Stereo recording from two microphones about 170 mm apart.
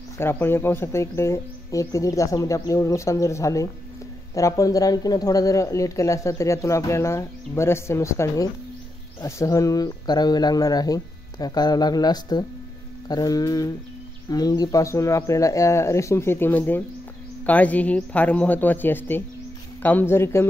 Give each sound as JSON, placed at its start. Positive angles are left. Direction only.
{"t": 0.2, "sound": "speech", "side_deg": 15}